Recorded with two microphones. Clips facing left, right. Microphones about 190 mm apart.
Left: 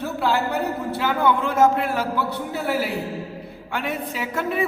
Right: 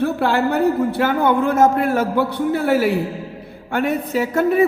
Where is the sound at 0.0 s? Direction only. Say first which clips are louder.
Right 5 dB; 60° right (ahead or behind).